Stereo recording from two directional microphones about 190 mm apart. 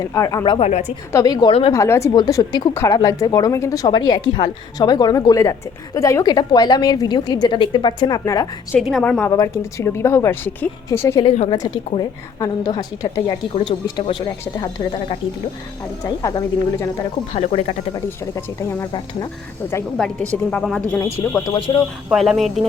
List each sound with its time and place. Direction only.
0.0 s a woman's voice: 15° left (ahead or behind)
0.7 s speech: 35° left (ahead or behind)
1.1 s a woman's voice: 20° left (ahead or behind)
1.7 s a woman's voice: 15° left (ahead or behind)
8.8 s a woman's voice: centre (ahead or behind)
11.2 s a woman's voice: 30° left (ahead or behind)
16.0 s a woman's voice: 20° left (ahead or behind)
17.3 s speech: 35° left (ahead or behind)
17.9 s a woman's voice: 15° left (ahead or behind)
20.0 s a woman's voice: centre (ahead or behind)
22.1 s speech: centre (ahead or behind)